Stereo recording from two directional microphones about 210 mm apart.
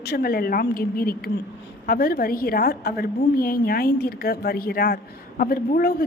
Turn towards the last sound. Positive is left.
turn(degrees=45)  # may be behind; listen again after turning